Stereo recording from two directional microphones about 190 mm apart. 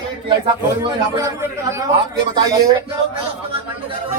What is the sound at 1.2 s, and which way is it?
A man's voice, 15° right (ahead or behind).